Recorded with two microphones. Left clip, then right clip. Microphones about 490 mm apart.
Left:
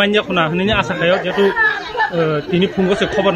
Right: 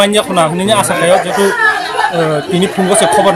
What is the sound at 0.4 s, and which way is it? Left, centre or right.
Speech, left.